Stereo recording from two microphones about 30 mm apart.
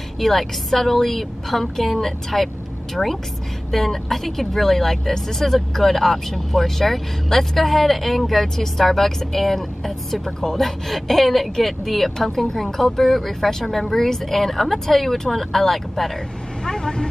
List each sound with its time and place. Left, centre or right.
0.2 s speech: centre
13.9 s speech: centre
16.6 s speech: centre